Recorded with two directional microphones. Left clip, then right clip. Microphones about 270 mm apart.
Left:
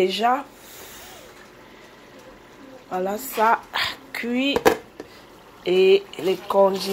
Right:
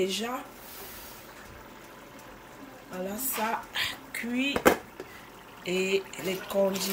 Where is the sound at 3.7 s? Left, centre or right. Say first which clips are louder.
Left 6 dB; centre.